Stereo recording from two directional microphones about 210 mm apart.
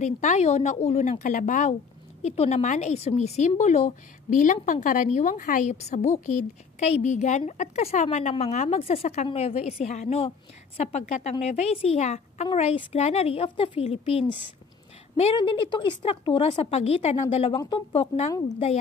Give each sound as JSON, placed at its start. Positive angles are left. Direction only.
{"t": 0.0, "sound": "a woman's voice", "side_deg": 35}